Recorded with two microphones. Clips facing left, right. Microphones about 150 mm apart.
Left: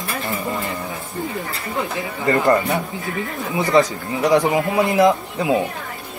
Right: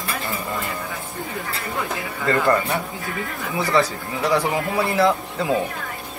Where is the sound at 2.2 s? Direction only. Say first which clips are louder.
Left 3 dB; 20° left (ahead or behind).